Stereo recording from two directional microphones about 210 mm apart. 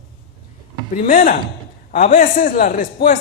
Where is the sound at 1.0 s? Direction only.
40° left (ahead or behind).